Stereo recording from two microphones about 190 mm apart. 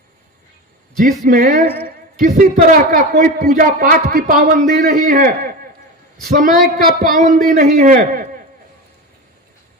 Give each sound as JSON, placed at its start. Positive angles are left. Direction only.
{"t": 0.9, "sound": "a man's voice", "side_deg": -45}
{"t": 6.7, "sound": "a man's voice", "side_deg": -50}